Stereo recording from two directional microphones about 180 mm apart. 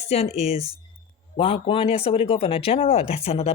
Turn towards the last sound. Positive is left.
turn(degrees=35)  # may be behind; listen again after turning